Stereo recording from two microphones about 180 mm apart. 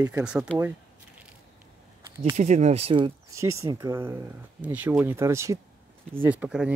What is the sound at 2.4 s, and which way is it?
Speech, 40° right (ahead or behind).